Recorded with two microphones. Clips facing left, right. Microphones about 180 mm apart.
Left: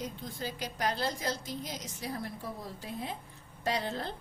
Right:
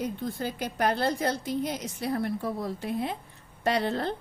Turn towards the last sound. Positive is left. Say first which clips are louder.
# right 7 dB
turn(degrees=-65)  # may be behind; listen again after turning